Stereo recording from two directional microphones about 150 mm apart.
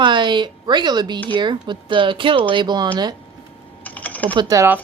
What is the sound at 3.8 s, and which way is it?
Typing, 10° left (ahead or behind).